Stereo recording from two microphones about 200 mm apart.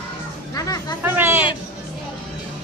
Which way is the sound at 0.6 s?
20° left (ahead or behind).